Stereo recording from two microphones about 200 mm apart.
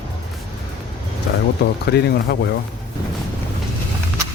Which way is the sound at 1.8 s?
55° left (ahead or behind).